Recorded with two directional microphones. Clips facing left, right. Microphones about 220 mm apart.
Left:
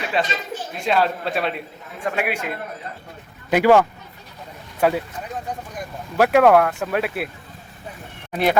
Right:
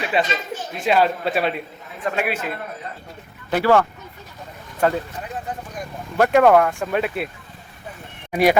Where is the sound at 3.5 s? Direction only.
15° left (ahead or behind).